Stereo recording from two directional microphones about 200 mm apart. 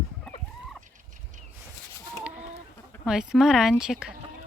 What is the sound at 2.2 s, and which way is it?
Chicken, 5° right (ahead or behind).